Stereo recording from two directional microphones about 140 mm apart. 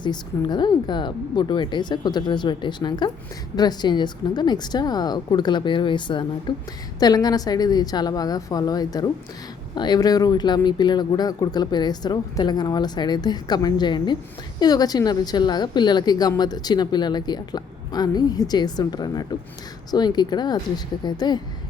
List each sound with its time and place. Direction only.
0.0 s a woman's voice: 30° left (ahead or behind)